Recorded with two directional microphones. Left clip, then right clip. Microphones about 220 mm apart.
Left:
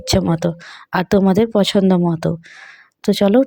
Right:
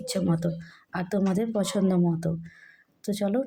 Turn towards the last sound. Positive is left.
turn(degrees=40)  # may be behind; listen again after turning